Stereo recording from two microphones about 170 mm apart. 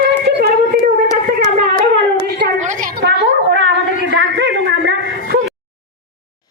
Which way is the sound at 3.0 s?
85° right.